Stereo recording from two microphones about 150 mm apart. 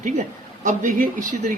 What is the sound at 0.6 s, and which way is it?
Speech, 60° right (ahead or behind).